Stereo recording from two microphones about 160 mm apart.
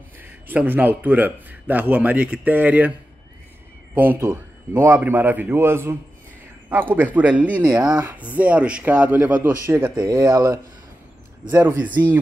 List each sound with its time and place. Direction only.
0.2 s speech: 10° right (ahead or behind)
3.9 s speech: 10° right (ahead or behind)
9.9 s speech: 25° right (ahead or behind)